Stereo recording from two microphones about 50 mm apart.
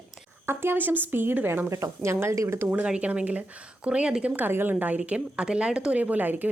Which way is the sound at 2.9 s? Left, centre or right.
Right.